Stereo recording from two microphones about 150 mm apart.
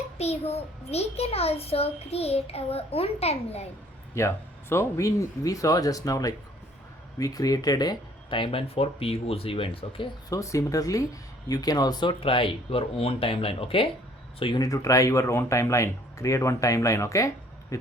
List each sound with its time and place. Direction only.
0.2 s a child's voice: 45° left (ahead or behind)
4.1 s speech: 20° left (ahead or behind); by 10.1 s 35° left (ahead or behind)
10.2 s speech: 20° left (ahead or behind)